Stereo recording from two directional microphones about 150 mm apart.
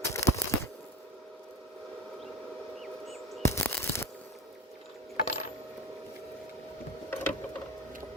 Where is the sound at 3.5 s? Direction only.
20° left (ahead or behind).